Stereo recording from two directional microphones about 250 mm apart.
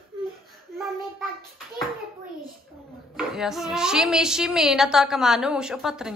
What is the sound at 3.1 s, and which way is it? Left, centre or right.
A woman's voice, centre.